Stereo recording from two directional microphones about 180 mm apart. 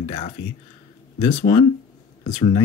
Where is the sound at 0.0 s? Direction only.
30° left (ahead or behind).